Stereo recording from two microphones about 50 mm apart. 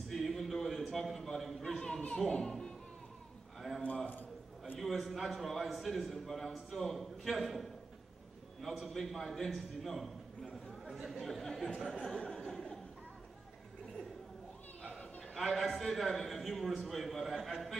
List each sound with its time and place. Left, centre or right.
0.1 s a sound: centre
0.9 s a man's voice: centre
1.8 s speech: centre
3.8 s a man's voice: left
4.7 s a man's voice: centre
11.1 s a man's voice: centre
12.3 s chuckle: centre
14.8 s chatter: centre
15.3 s a man's voice: centre